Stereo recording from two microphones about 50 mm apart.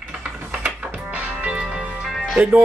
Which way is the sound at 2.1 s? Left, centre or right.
Centre.